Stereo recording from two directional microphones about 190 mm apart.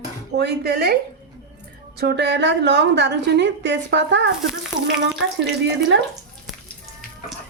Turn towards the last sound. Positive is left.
turn(degrees=-65)  # may be behind; listen again after turning